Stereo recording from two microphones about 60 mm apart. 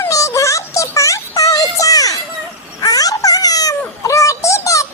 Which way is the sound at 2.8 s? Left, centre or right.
Left.